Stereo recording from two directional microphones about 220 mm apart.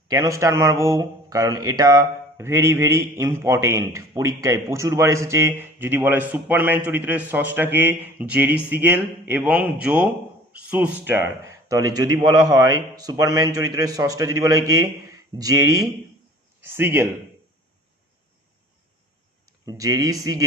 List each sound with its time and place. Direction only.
0.1 s speech: 15° right (ahead or behind)
19.5 s speech: 15° right (ahead or behind)